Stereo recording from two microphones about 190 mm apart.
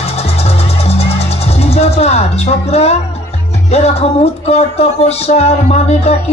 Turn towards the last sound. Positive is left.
turn(degrees=35)  # may be behind; listen again after turning